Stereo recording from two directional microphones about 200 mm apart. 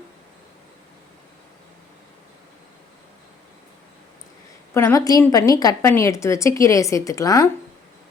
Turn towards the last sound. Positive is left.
turn(degrees=15)  # may be behind; listen again after turning